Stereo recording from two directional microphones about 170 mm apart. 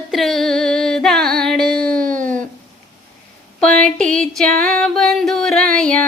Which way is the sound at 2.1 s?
5° left (ahead or behind).